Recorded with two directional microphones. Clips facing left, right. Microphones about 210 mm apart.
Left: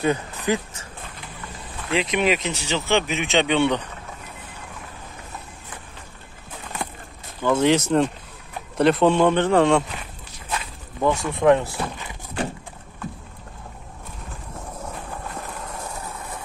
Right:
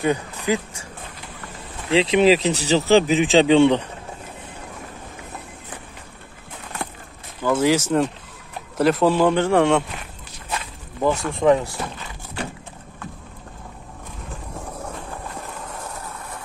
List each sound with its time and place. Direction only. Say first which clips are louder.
0.0 s speech: right 1 dB; 15° right (ahead or behind)
1.9 s speech: right 6 dB; 30° right (ahead or behind)
7.4 s speech: even; 5° right (ahead or behind)
10.5 s a sound: even; 5° right (ahead or behind)